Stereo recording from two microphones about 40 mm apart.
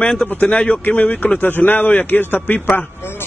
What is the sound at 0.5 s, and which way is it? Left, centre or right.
Speech, left.